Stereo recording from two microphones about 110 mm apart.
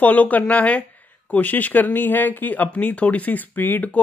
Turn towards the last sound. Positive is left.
turn(degrees=15)  # may be behind; listen again after turning